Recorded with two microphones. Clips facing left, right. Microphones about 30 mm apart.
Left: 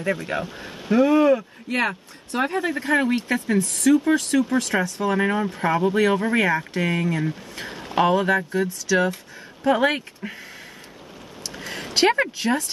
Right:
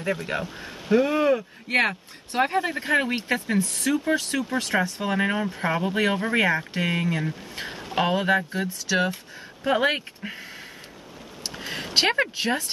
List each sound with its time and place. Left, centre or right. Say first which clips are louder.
0.0 s speech: left 2 dB; centre
1.0 s speech: left 5 dB; centre
1.7 s speech: right 1 dB; right; by 4.4 s centre
4.8 s speech: left 4 dB; right
5.1 s speech: left 2 dB; centre
7.7 s a sound: left 5 dB; centre
8.1 s speech: left 2 dB; centre
9.7 s speech: left 3 dB; centre
11.6 s speech: left 3 dB; centre